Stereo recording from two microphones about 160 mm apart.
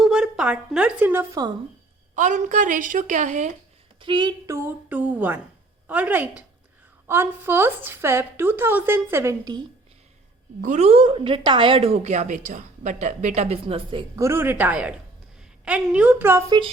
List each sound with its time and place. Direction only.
0.0 s a woman's voice: 5° right (ahead or behind)
2.1 s a woman's voice: 50° right (ahead or behind)
4.0 s a woman's voice: 30° right (ahead or behind)
10.6 s a woman's voice: 45° right (ahead or behind)
14.2 s a woman's voice: 15° right (ahead or behind)